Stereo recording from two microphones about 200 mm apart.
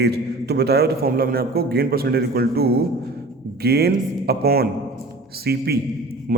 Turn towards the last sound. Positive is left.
turn(degrees=-50)  # may be behind; listen again after turning